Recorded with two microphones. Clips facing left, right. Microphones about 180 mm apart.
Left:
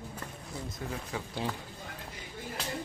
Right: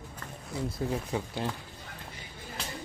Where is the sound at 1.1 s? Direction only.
20° right (ahead or behind).